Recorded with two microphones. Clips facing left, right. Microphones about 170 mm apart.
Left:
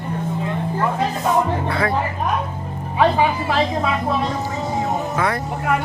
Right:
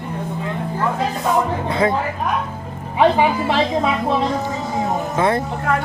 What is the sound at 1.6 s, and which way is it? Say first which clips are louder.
Speech: right 3 dB; 20° right (ahead or behind).